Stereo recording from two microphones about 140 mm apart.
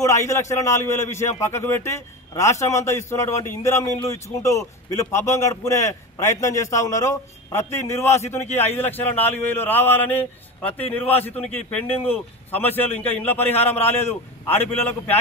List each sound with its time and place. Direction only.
0.0 s a man's voice: 20° left (ahead or behind)